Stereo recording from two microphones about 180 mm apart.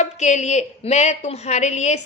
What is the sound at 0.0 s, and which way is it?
A woman's voice, 40° left (ahead or behind).